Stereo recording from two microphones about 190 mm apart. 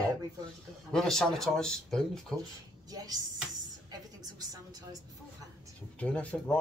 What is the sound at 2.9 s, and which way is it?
Speech, 20° right (ahead or behind).